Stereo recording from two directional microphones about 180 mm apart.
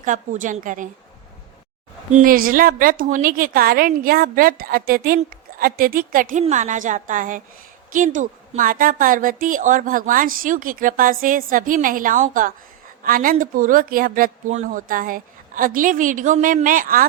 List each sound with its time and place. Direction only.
0.0 s a woman's voice: 45° right (ahead or behind)
2.1 s a woman's voice: 50° right (ahead or behind)